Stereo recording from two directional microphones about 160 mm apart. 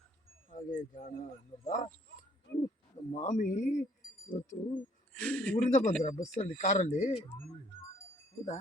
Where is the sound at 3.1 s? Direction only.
50° left (ahead or behind).